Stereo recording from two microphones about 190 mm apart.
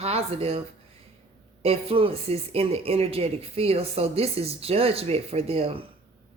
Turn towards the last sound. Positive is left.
turn(degrees=-30)  # may be behind; listen again after turning